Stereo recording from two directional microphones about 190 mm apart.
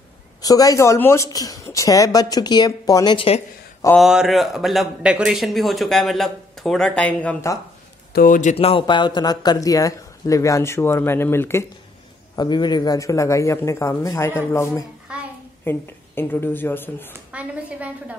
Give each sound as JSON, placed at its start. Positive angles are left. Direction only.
{"t": 0.4, "sound": "speech", "side_deg": 20}
{"t": 4.0, "sound": "a man's voice", "side_deg": 0}
{"t": 8.1, "sound": "speech", "side_deg": 45}
{"t": 12.4, "sound": "speech", "side_deg": 25}
{"t": 15.1, "sound": "a sound", "side_deg": -5}
{"t": 15.6, "sound": "speech", "side_deg": 10}
{"t": 17.1, "sound": "a woman's voice", "side_deg": -5}